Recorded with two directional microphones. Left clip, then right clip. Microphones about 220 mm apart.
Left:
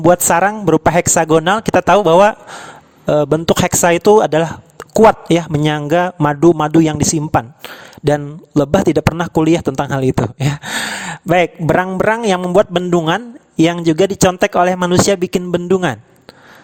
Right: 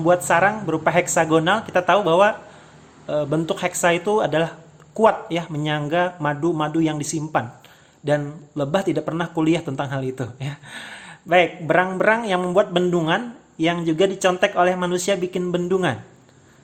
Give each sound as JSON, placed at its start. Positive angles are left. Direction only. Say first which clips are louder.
{"t": 0.0, "sound": "speech", "louder": "left 6 dB", "side_deg": 50}